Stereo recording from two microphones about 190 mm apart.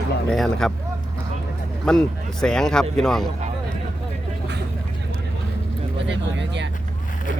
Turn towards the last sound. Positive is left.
turn(degrees=-70)  # may be behind; listen again after turning